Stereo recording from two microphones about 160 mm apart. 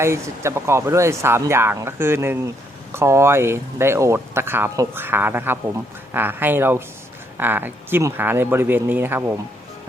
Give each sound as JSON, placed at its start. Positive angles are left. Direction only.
{"t": 0.0, "sound": "speech", "side_deg": -15}